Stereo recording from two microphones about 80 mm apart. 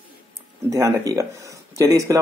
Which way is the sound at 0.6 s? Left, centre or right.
Right.